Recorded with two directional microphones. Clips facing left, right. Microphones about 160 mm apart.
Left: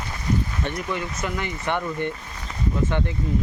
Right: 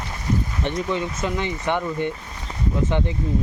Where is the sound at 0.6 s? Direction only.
20° right (ahead or behind).